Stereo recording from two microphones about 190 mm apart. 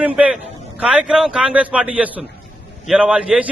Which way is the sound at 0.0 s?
5° right (ahead or behind).